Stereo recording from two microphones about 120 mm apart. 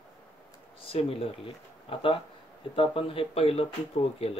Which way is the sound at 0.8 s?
50° left (ahead or behind).